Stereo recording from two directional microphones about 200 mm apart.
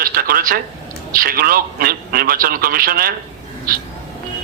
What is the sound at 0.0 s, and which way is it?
Telephone, 45° right (ahead or behind).